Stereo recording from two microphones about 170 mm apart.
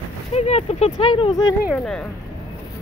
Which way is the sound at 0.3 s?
40° left (ahead or behind).